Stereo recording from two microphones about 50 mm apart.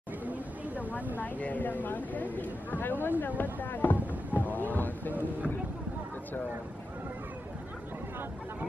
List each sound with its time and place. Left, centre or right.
1.2 s speech: left